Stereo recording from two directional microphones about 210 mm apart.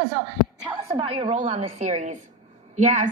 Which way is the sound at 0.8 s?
25° right (ahead or behind).